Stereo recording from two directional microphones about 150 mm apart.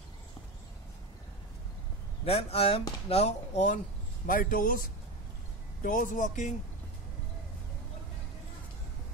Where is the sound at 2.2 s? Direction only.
40° left (ahead or behind).